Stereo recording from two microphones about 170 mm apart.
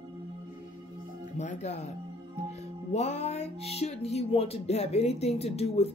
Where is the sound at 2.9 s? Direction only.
40° left (ahead or behind).